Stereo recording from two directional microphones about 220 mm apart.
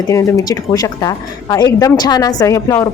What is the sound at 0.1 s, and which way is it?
Speech, 15° left (ahead or behind).